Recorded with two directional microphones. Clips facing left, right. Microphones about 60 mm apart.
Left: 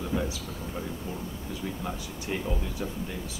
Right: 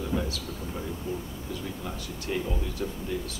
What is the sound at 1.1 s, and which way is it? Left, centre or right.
Speech, left.